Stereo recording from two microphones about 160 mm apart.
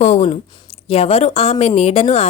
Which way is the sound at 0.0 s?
45° left (ahead or behind).